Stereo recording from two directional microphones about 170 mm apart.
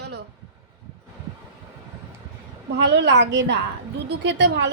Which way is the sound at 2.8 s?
90° right.